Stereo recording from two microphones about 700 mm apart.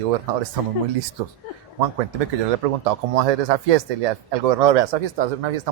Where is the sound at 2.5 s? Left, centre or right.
Right.